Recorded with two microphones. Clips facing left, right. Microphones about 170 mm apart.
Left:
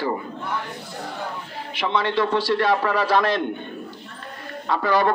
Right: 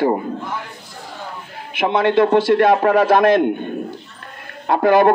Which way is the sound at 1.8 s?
50° right (ahead or behind).